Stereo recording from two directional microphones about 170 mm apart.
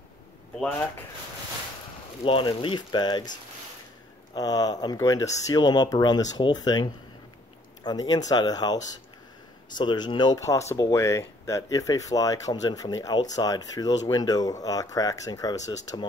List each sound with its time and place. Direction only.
0.6 s speech: 10° left (ahead or behind)
2.2 s speech: 30° left (ahead or behind)
4.4 s speech: 20° left (ahead or behind)
9.8 s speech: 25° left (ahead or behind)